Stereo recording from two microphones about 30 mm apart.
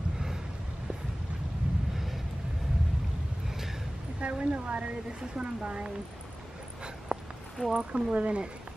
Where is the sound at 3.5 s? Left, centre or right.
Centre.